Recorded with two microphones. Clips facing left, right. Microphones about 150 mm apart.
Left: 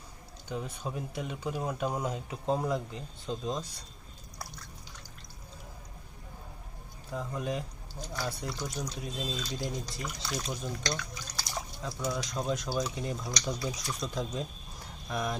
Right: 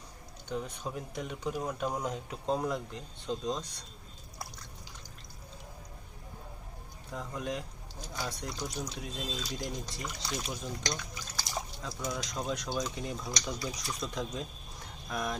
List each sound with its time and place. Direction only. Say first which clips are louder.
0.4 s speech: even; 5° left (ahead or behind)
7.1 s speech: left 2 dB; centre (ahead or behind)
10.8 s speech: left 2 dB; 20° right (ahead or behind)
11.4 s liquid: left 1 dB; centre (ahead or behind)
12.0 s speech: left 3 dB; 5° left (ahead or behind)